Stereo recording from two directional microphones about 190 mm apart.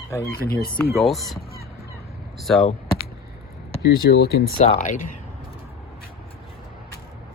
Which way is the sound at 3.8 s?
60° left (ahead or behind).